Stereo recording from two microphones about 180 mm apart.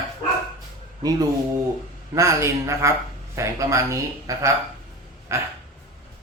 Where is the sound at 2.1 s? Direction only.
15° right (ahead or behind).